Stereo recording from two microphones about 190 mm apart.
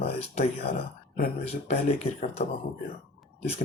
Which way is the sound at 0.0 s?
35° left (ahead or behind).